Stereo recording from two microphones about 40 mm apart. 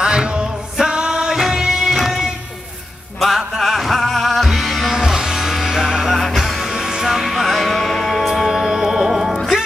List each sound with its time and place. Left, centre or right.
0.0 s music: right
1.9 s music: centre
4.9 s music: centre
6.1 s music: centre
7.2 s music: centre
8.3 s music: centre